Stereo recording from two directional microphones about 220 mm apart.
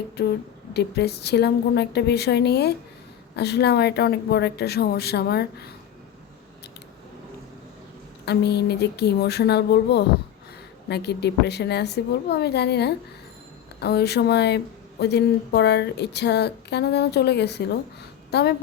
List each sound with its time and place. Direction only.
0.2 s a sound: 45° left (ahead or behind)
0.7 s speech: 50° left (ahead or behind)
8.2 s a woman's voice: 50° left (ahead or behind)